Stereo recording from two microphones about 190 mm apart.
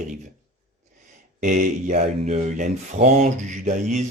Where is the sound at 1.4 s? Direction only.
40° right (ahead or behind).